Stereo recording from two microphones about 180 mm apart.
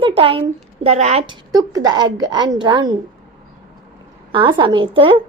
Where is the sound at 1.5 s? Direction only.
20° right (ahead or behind).